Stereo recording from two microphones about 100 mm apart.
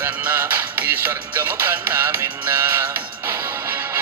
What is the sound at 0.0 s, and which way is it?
Music, 20° right (ahead or behind).